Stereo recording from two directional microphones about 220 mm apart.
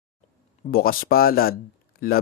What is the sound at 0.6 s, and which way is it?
Speech, 40° left (ahead or behind).